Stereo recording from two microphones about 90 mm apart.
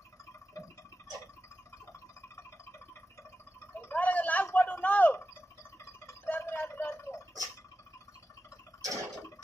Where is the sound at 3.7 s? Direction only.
20° left (ahead or behind).